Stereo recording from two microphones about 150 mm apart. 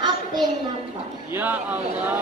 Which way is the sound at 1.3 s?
10° right (ahead or behind).